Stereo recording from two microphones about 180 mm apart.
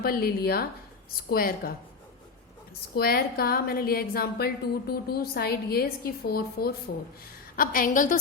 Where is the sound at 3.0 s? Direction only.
55° left (ahead or behind).